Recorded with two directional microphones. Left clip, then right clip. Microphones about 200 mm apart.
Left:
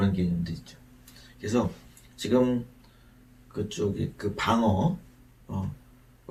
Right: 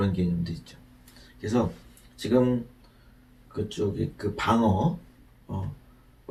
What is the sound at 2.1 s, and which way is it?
Speech, 15° left (ahead or behind).